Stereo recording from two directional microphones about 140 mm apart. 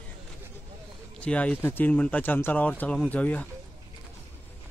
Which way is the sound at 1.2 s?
10° left (ahead or behind).